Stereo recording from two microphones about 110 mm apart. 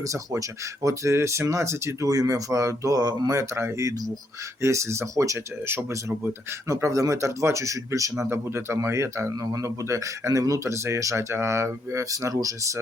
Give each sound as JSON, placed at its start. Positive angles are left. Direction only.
{"t": 0.0, "sound": "speech", "side_deg": -30}